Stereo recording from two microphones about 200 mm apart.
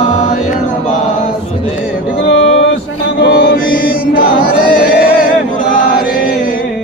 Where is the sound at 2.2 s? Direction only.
60° left (ahead or behind).